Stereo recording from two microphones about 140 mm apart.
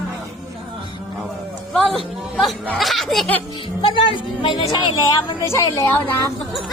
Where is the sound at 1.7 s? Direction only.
Centre (ahead or behind).